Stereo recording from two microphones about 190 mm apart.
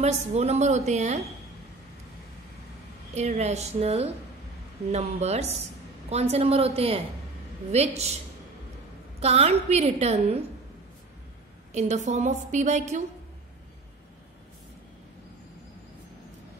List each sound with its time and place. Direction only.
0.0 s a woman's voice: 35° right (ahead or behind)
3.2 s a woman's voice: 35° right (ahead or behind)
9.2 s a woman's voice: 35° right (ahead or behind)
11.7 s a woman's voice: 40° right (ahead or behind)